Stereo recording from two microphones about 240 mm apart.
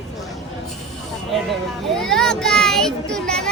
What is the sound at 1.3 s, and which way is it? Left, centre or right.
A child's voice, centre.